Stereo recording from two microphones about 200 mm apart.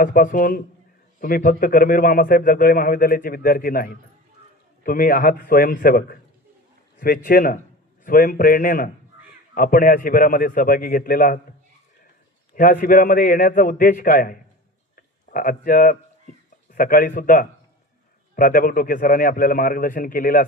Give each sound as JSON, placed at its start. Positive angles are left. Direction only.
{"t": 0.0, "sound": "a man's voice", "side_deg": 45}
{"t": 12.5, "sound": "a man's voice", "side_deg": 45}